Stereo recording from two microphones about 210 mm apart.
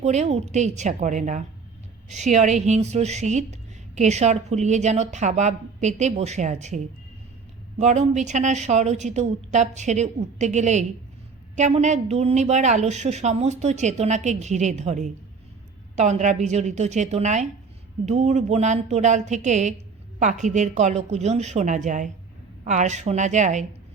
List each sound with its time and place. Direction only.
0.0 s a woman's voice: 35° right (ahead or behind)